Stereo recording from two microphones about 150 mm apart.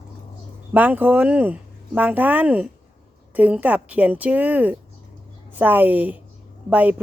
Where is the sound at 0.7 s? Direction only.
10° right (ahead or behind).